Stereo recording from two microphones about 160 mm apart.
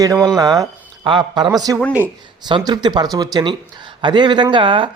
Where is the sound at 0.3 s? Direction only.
25° right (ahead or behind).